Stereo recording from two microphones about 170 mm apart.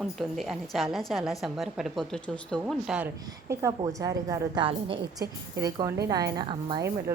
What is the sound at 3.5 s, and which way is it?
A woman's voice, 20° right (ahead or behind).